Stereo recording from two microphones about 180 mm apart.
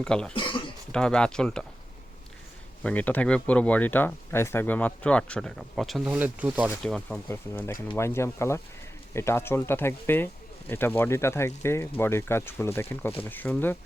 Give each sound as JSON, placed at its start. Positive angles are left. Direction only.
{"t": 0.0, "sound": "speech", "side_deg": 5}
{"t": 0.3, "sound": "a sound", "side_deg": 25}
{"t": 0.9, "sound": "speech", "side_deg": 5}
{"t": 2.8, "sound": "speech", "side_deg": 10}
{"t": 6.8, "sound": "speech", "side_deg": 5}